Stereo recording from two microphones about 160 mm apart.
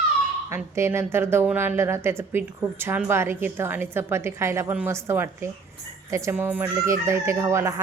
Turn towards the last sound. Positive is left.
turn(degrees=-15)  # may be behind; listen again after turning